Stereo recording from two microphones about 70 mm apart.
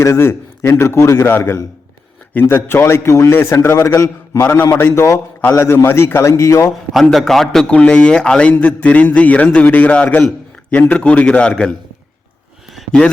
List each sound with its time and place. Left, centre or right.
0.0 s a man's voice: left
4.8 s a man's voice: left
6.9 s a man's voice: centre
7.7 s a man's voice: centre